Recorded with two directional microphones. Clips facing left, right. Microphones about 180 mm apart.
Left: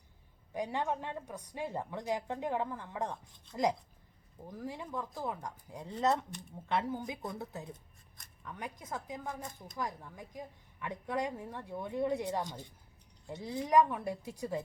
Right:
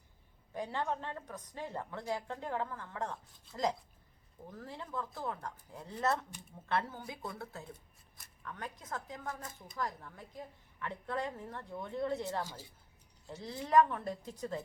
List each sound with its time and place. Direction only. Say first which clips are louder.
0.5 s a woman's voice: left 2 dB; 15° left (ahead or behind)
12.5 s a woman's voice: left 4 dB; 5° right (ahead or behind)
13.2 s a woman's voice: left 4 dB; 15° left (ahead or behind)